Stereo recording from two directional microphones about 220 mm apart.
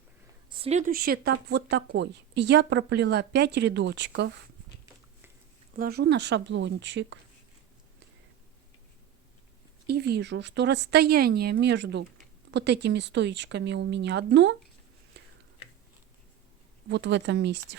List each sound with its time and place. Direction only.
0.5 s speech: 30° right (ahead or behind); by 4.3 s 50° right (ahead or behind)
5.7 s speech: 45° right (ahead or behind)
9.8 s speech: 45° right (ahead or behind)
16.9 s speech: 55° right (ahead or behind)